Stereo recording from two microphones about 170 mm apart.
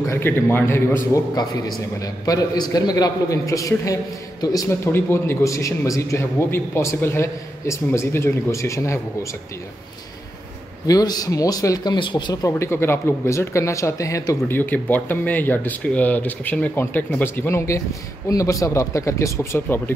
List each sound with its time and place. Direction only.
0.1 s a man's voice: 15° left (ahead or behind)
10.9 s a man's voice: 20° left (ahead or behind)